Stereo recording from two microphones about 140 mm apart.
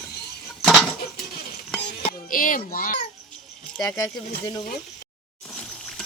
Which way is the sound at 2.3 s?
80° left.